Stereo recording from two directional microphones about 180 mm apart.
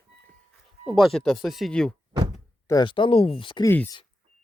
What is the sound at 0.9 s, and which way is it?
Speech, centre (ahead or behind).